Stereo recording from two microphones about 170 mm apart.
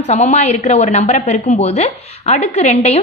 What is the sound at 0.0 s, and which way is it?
A woman's voice, 40° left (ahead or behind).